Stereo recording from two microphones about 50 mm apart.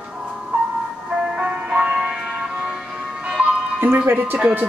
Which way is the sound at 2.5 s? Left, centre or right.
Centre.